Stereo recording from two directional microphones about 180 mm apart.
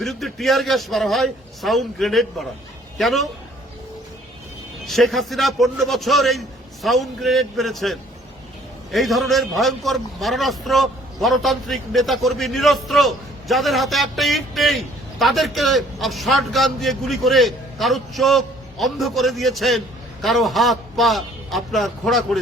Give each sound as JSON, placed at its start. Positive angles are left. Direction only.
{"t": 0.0, "sound": "a man's voice", "side_deg": 0}
{"t": 4.9, "sound": "a man's voice", "side_deg": 0}